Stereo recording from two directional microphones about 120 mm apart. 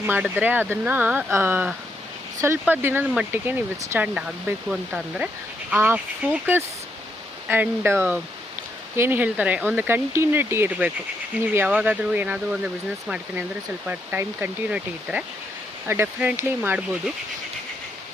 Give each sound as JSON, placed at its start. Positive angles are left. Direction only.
{"t": 0.3, "sound": "speech", "side_deg": -15}
{"t": 5.7, "sound": "speech", "side_deg": -20}